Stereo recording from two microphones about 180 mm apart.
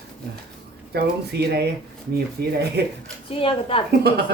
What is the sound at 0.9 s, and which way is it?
Speech, 65° right (ahead or behind).